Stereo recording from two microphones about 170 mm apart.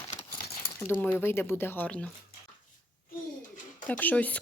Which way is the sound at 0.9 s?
10° left (ahead or behind).